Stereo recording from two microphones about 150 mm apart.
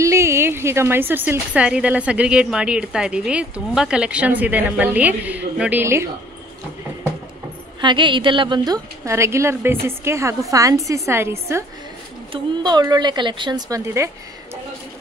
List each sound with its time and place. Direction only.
0.0 s a woman's voice: 20° right (ahead or behind)
7.8 s a woman's voice: 30° right (ahead or behind); by 11.6 s 15° right (ahead or behind)
12.3 s a woman's voice: 30° right (ahead or behind)